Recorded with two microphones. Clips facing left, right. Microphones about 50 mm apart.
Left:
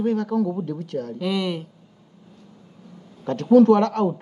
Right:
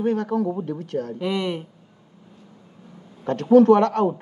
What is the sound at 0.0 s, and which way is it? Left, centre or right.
A man's voice, right.